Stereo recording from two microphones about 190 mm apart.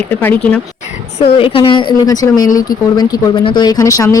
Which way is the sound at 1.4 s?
30° left (ahead or behind).